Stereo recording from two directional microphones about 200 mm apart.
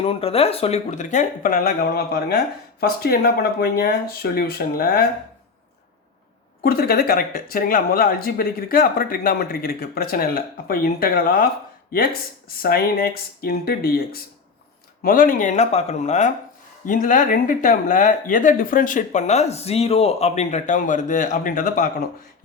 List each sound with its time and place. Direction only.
0.0 s speech: 30° left (ahead or behind); by 5.0 s 50° left (ahead or behind)
6.6 s speech: 50° left (ahead or behind)
12.6 s speech: 50° left (ahead or behind)